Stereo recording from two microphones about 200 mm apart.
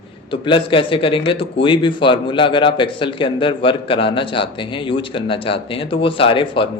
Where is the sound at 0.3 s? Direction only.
25° left (ahead or behind).